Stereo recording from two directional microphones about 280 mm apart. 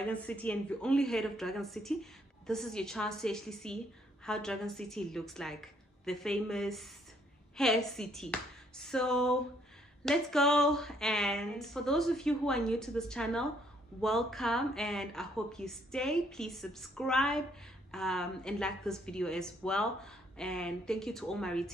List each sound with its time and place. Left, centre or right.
0.0 s a woman's voice: centre